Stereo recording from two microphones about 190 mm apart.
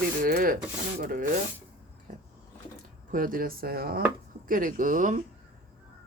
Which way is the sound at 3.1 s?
45° right (ahead or behind).